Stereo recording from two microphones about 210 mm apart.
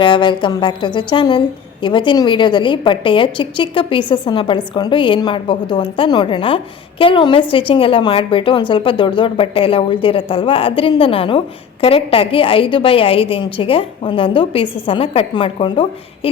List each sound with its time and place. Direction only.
0.0 s a woman's voice: 20° left (ahead or behind)